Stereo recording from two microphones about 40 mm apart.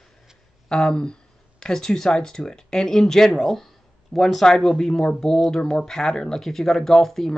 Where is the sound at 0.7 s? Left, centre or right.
Left.